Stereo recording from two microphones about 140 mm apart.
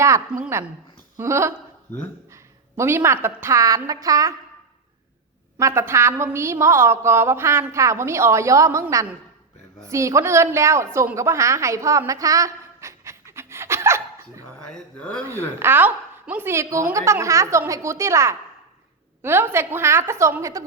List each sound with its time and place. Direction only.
0.3 s a woman's voice: 5° right (ahead or behind)
1.1 s a sound: 20° right (ahead or behind)
2.3 s a woman's voice: 20° right (ahead or behind)
5.5 s a woman's voice: 20° right (ahead or behind)
11.1 s a sound: 20° right (ahead or behind)
14.9 s speech: 10° left (ahead or behind)
15.3 s a woman's voice: 20° right (ahead or behind)